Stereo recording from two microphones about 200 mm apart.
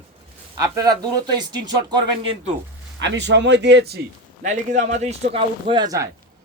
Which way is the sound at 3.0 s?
60° right (ahead or behind).